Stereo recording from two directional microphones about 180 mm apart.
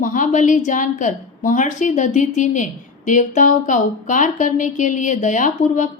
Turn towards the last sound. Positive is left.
turn(degrees=45)  # may be behind; listen again after turning